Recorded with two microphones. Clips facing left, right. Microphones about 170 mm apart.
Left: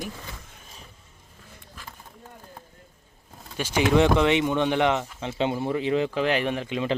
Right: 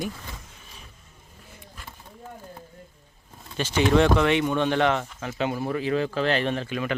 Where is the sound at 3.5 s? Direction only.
10° left (ahead or behind).